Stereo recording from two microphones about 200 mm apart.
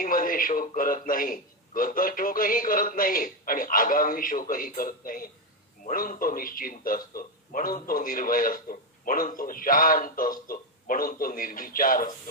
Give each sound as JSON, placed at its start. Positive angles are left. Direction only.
{"t": 0.0, "sound": "a man's voice", "side_deg": 45}